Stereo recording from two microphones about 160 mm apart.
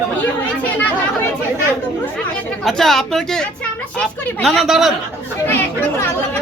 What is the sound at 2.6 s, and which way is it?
A woman's voice, centre (ahead or behind).